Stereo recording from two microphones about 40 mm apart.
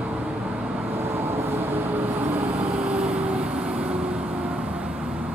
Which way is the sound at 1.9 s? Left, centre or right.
Right.